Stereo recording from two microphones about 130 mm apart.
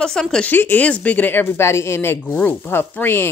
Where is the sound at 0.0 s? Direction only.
5° left (ahead or behind).